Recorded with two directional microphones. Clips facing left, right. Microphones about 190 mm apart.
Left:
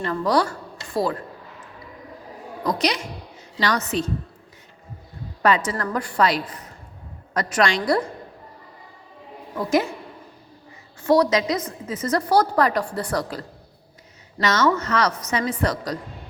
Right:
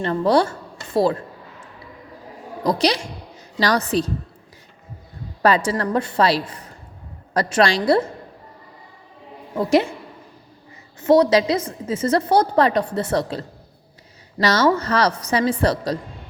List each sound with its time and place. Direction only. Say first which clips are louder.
0.0 s a woman's voice: right 4 dB; 30° right (ahead or behind)
2.6 s a woman's voice: right 4 dB; 30° right (ahead or behind)
5.4 s a woman's voice: right 3 dB; 35° right (ahead or behind)
9.6 s a woman's voice: right 4 dB; 30° right (ahead or behind)
11.0 s a woman's voice: right 4 dB; 25° right (ahead or behind)
14.4 s a woman's voice: right 3 dB; 35° right (ahead or behind)